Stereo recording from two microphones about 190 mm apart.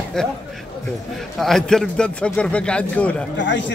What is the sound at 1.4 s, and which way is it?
A man's voice, centre (ahead or behind).